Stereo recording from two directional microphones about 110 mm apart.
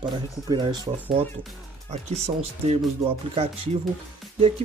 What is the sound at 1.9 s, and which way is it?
Speech, 75° right (ahead or behind).